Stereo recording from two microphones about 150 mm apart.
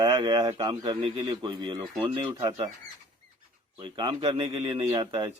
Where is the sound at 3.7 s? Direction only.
30° right (ahead or behind).